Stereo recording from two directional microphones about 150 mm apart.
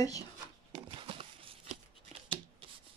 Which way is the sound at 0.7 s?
35° right (ahead or behind).